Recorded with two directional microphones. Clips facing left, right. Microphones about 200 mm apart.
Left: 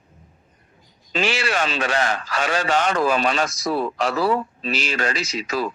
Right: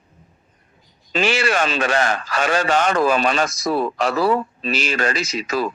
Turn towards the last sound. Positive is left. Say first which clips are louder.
# right 2 dB
turn(degrees=-50)  # may be behind; listen again after turning